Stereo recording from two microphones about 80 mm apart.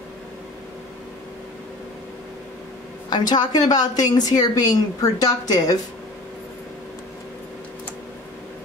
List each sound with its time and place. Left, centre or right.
3.1 s a woman's voice: left